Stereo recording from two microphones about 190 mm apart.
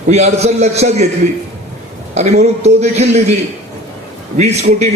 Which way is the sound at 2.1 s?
35° right (ahead or behind).